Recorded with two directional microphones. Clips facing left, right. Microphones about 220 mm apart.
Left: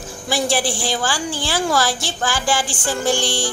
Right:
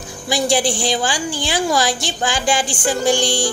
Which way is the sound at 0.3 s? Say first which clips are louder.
Right 3 dB; 15° right (ahead or behind).